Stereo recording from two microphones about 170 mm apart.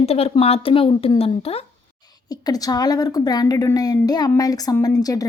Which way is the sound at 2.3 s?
20° left (ahead or behind).